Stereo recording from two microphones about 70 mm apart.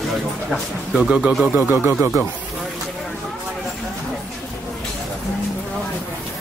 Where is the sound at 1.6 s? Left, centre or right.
Right.